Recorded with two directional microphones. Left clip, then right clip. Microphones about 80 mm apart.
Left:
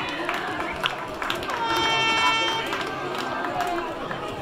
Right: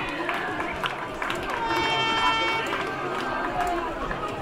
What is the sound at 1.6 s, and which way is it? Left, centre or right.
Run, left.